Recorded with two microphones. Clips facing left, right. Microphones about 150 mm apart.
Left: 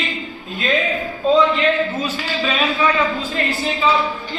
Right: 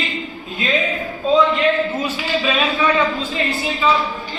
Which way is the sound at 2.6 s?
Centre (ahead or behind).